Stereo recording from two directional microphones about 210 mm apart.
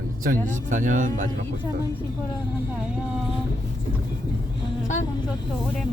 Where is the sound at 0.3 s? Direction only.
35° right (ahead or behind).